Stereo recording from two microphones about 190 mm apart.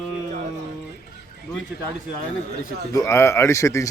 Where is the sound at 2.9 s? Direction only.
15° left (ahead or behind).